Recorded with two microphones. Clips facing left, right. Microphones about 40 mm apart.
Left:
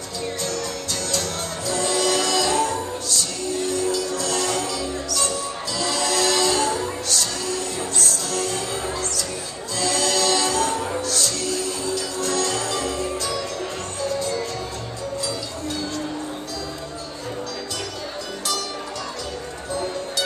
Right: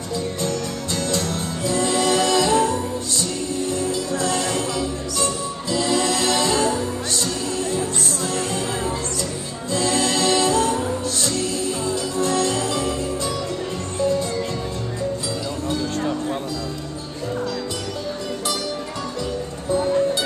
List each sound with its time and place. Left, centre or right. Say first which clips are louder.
0.4 s music: right 2 dB; right
9.8 s music: right 1 dB; right
19.7 s music: right 8 dB; centre